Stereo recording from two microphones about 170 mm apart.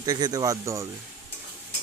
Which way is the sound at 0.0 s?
25° right (ahead or behind).